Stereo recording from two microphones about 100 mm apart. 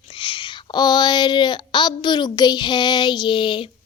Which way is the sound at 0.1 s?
60° left (ahead or behind).